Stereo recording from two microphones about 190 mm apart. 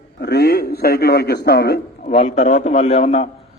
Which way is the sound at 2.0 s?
35° left (ahead or behind).